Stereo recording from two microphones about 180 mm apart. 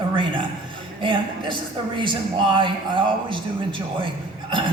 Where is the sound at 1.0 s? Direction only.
30° right (ahead or behind).